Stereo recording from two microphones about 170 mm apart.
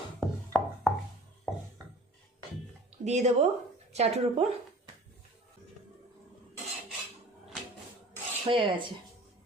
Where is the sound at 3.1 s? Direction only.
40° right (ahead or behind).